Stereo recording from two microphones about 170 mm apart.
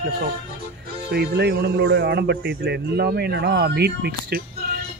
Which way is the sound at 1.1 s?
70° right (ahead or behind).